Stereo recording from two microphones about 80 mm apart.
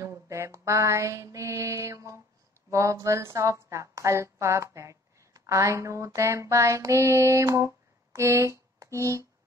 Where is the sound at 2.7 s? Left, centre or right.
Right.